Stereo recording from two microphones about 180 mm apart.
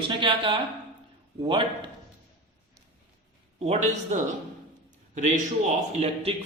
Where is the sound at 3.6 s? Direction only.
35° right (ahead or behind).